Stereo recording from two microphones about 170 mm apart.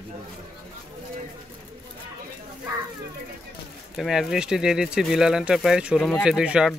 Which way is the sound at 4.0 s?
Centre (ahead or behind).